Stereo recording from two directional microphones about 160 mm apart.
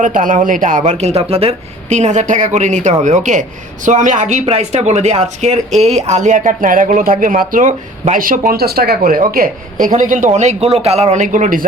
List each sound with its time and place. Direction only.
0.0 s a woman's voice: 55° right (ahead or behind)